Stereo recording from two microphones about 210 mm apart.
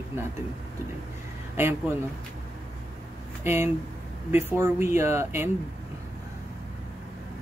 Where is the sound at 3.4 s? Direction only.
10° right (ahead or behind).